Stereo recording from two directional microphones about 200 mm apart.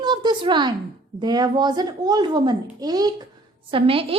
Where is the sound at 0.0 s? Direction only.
20° right (ahead or behind).